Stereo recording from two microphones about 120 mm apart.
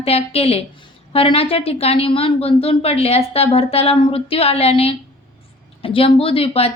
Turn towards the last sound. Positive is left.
turn(degrees=55)  # may be behind; listen again after turning